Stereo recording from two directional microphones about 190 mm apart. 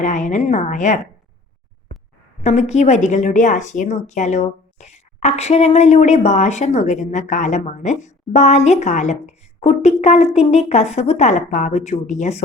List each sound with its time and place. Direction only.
0.0 s a woman's voice: 40° left (ahead or behind)
2.4 s a woman's voice: 35° left (ahead or behind)